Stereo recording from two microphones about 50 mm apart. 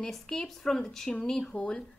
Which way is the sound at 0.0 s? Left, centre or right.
Centre.